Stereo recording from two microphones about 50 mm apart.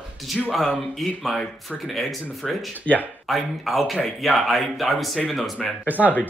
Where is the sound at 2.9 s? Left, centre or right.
Left.